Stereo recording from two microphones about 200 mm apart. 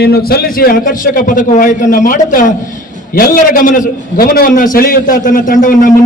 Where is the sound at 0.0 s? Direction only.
50° left (ahead or behind).